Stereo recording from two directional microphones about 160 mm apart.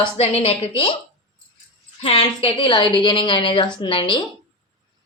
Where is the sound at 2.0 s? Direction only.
40° left (ahead or behind).